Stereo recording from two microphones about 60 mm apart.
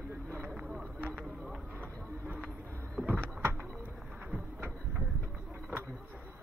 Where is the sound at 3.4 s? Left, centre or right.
Right.